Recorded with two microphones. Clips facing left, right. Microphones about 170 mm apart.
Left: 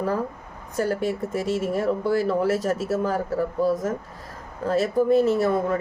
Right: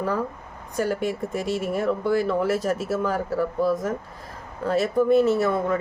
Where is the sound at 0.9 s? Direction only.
35° left (ahead or behind).